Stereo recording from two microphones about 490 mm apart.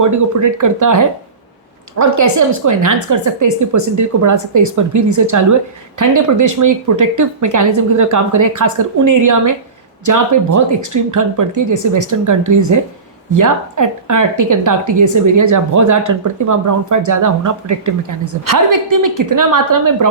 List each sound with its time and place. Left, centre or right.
0.0 s a woman's voice: right